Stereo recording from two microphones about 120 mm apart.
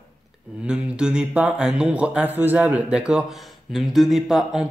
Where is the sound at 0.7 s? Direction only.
10° right (ahead or behind).